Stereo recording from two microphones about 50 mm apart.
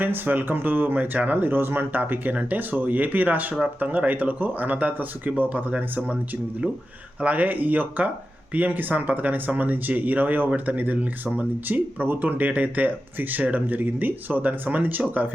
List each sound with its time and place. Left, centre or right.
0.0 s speech: right
7.2 s speech: right